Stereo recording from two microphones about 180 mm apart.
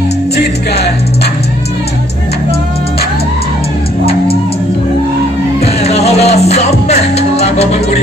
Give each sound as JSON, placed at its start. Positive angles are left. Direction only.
{"t": 5.8, "sound": "music", "side_deg": 35}